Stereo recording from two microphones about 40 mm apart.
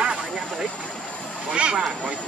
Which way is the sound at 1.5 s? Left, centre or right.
Right.